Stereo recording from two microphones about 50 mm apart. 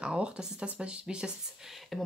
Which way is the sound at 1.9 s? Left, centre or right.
Centre.